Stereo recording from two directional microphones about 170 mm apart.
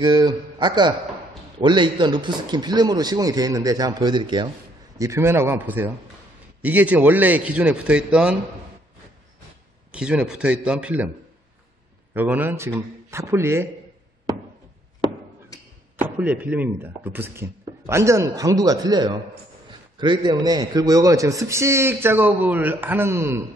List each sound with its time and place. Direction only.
0.0 s a man's voice: 25° right (ahead or behind); by 8.4 s 5° right (ahead or behind)
9.9 s a man's voice: 5° right (ahead or behind)
12.1 s a man's voice: 10° right (ahead or behind)
16.0 s a man's voice: 10° right (ahead or behind)